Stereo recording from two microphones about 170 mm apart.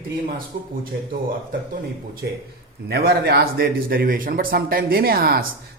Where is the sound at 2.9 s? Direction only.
65° right (ahead or behind).